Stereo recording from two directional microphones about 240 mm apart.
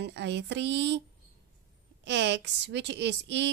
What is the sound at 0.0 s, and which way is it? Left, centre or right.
A woman's voice, right.